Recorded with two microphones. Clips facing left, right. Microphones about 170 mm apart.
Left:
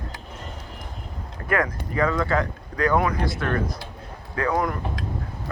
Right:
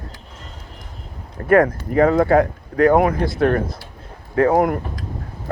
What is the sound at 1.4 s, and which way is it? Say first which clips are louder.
Speech: right 10 dB; 50° right (ahead or behind).